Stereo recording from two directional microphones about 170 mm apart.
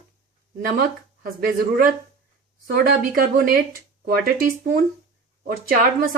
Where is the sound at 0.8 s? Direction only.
60° right (ahead or behind).